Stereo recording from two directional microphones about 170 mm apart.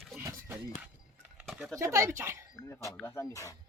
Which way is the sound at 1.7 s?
15° right (ahead or behind).